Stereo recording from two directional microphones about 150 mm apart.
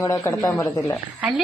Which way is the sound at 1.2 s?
5° right (ahead or behind).